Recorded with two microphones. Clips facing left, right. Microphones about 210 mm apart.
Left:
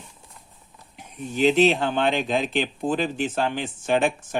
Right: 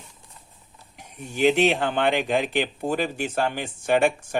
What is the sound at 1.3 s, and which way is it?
A man's voice, 15° right (ahead or behind).